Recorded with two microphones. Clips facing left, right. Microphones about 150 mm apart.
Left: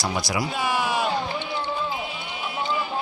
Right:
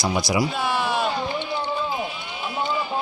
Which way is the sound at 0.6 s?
10° left (ahead or behind).